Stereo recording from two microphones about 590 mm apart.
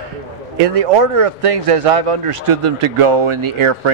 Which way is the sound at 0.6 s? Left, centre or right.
Right.